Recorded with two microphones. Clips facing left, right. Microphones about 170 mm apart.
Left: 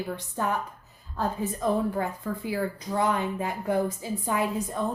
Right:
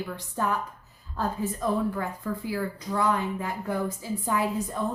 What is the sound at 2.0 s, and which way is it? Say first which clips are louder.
Speech: left 1 dB; 20° left (ahead or behind).